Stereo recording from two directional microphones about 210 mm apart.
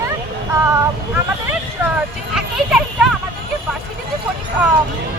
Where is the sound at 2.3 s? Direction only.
Centre (ahead or behind).